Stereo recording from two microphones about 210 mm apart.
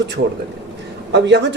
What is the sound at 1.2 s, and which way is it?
Speech, 55° right (ahead or behind).